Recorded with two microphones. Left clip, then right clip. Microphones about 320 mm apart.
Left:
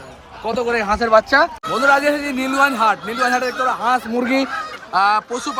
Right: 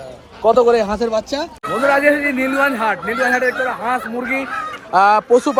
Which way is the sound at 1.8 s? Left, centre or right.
Centre.